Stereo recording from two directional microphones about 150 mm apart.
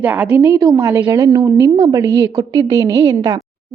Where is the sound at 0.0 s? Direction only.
10° right (ahead or behind).